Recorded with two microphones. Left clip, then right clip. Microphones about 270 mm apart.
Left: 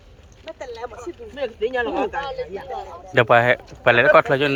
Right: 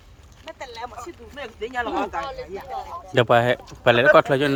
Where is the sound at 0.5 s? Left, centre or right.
Right.